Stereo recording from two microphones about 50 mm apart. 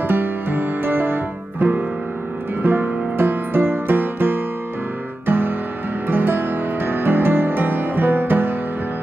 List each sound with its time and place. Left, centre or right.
0.1 s music: right